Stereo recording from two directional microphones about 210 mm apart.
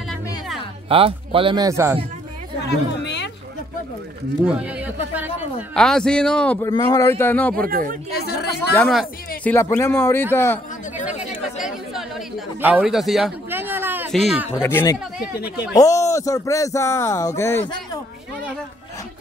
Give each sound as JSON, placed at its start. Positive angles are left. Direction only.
{"t": 0.8, "sound": "speech", "side_deg": -25}
{"t": 2.6, "sound": "a sound", "side_deg": 55}
{"t": 4.6, "sound": "a man's voice", "side_deg": -5}
{"t": 5.8, "sound": "speech", "side_deg": 5}
{"t": 6.7, "sound": "speech", "side_deg": 20}
{"t": 7.6, "sound": "speech", "side_deg": -45}
{"t": 8.5, "sound": "speech", "side_deg": 5}
{"t": 11.1, "sound": "chatter", "side_deg": -5}
{"t": 14.1, "sound": "a man's voice", "side_deg": -5}
{"t": 14.5, "sound": "speech", "side_deg": 10}